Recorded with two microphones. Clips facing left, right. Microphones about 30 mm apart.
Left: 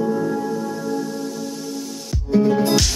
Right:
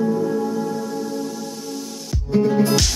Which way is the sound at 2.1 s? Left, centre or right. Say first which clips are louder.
Left 1 dB; centre.